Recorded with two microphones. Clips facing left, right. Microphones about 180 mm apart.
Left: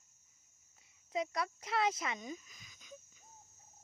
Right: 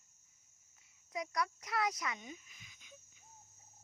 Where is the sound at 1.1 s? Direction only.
25° left (ahead or behind).